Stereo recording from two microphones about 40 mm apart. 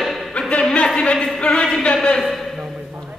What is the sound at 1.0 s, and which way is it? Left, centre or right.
Speech, left.